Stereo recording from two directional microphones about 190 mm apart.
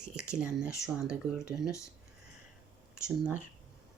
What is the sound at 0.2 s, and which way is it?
Speech, 5° right (ahead or behind).